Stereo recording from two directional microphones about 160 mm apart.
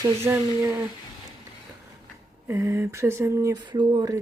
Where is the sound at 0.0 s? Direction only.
15° right (ahead or behind).